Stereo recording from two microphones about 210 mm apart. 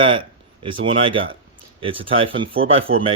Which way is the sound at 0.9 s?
25° right (ahead or behind).